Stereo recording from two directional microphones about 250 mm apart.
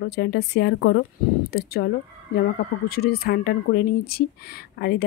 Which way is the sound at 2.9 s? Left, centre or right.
Left.